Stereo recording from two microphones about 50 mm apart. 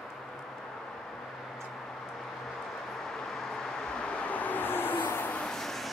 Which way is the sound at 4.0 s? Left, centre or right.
Left.